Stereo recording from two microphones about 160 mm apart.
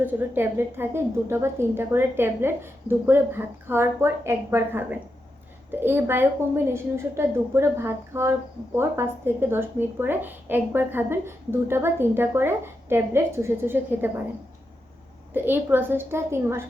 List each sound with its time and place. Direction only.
0.0 s a woman's voice: 10° right (ahead or behind)
15.3 s a woman's voice: 10° right (ahead or behind)